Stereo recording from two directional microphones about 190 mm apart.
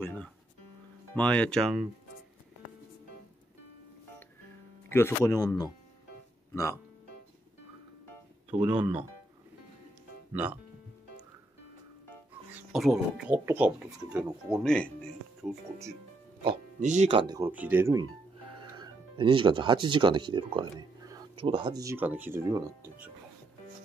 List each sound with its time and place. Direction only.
0.0 s speech: 10° left (ahead or behind)
4.8 s speech: 15° left (ahead or behind)
8.7 s speech: 25° right (ahead or behind)
10.3 s speech: 10° right (ahead or behind)
12.7 s speech: centre (ahead or behind)
16.8 s speech: 35° right (ahead or behind)
17.4 s speech: 10° right (ahead or behind)
18.6 s speech: 25° right (ahead or behind)